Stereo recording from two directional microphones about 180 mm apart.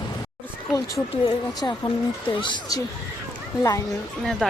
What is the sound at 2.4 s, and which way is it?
Speech, 25° left (ahead or behind).